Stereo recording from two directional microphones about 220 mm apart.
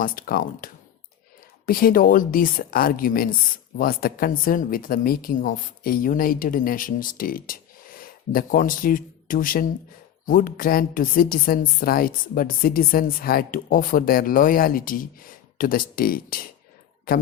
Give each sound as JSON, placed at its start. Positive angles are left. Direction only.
{"t": 0.0, "sound": "a woman's voice", "side_deg": 40}